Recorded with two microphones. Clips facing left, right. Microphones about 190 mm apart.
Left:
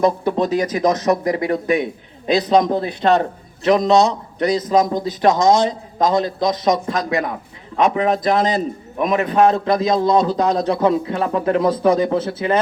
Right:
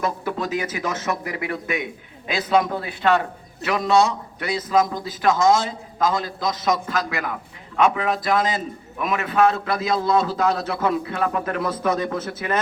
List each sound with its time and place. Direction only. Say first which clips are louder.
0.0 s a man's voice: left 8 dB; 35° left (ahead or behind)